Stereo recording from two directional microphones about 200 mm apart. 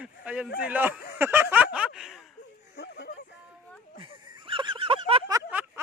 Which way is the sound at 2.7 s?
60° left (ahead or behind).